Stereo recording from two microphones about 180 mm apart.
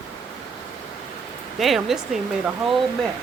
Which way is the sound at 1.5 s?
Centre (ahead or behind).